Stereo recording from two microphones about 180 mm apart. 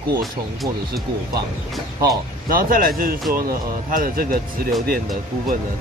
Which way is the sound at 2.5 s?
50° right (ahead or behind).